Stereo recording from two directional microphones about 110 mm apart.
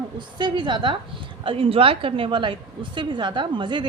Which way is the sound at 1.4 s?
60° right (ahead or behind).